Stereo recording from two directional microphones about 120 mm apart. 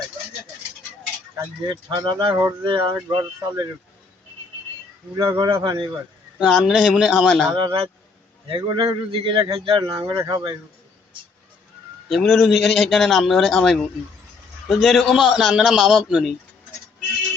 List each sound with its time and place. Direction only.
1.6 s speech: 35° right (ahead or behind)
5.1 s speech: 30° right (ahead or behind)
5.5 s speech: 45° right (ahead or behind)
6.4 s a man's voice: 5° right (ahead or behind)
7.5 s speech: 40° right (ahead or behind)
12.0 s a man's voice: centre (ahead or behind)